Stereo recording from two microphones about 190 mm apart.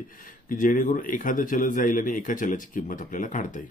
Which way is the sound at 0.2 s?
45° left (ahead or behind).